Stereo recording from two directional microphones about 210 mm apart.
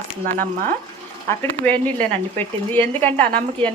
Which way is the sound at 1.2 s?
10° left (ahead or behind).